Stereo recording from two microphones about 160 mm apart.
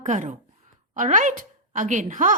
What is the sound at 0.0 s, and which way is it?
A woman's voice, 50° right (ahead or behind).